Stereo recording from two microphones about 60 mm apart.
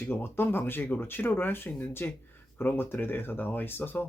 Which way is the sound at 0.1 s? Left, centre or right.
Left.